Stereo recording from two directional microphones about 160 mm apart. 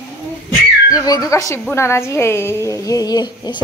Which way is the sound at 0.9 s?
25° left (ahead or behind).